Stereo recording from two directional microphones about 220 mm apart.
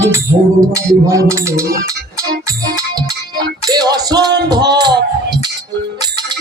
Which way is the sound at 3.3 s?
20° right (ahead or behind).